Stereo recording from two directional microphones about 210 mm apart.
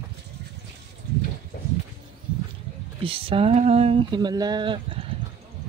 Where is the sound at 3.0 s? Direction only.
25° right (ahead or behind).